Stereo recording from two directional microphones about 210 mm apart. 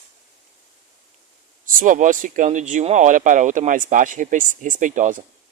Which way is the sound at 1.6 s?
40° right (ahead or behind).